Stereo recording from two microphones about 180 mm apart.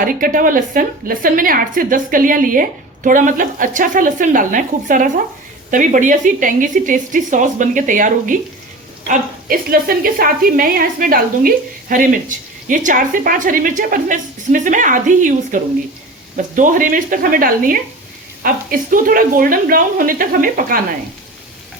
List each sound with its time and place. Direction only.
0.0 s a woman's voice: 50° right (ahead or behind)